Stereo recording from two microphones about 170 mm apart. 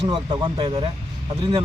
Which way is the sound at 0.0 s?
30° right (ahead or behind).